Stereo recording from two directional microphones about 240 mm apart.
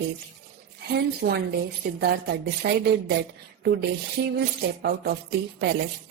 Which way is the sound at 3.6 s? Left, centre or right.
Right.